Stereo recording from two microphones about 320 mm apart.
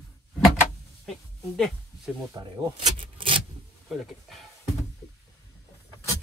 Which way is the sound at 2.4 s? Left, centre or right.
Centre.